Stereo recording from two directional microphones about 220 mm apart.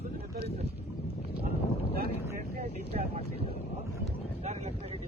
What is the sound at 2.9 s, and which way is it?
Vehicle, 30° right (ahead or behind).